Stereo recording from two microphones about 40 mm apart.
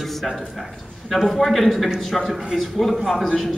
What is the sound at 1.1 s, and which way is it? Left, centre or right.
Speech, centre.